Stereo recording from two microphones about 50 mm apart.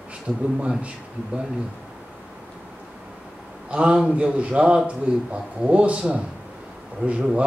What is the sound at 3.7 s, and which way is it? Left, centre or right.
A man's voice, centre.